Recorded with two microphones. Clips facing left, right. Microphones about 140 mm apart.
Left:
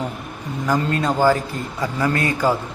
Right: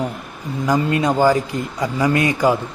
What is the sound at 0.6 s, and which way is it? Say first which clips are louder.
A man's voice: right 3 dB; 10° right (ahead or behind).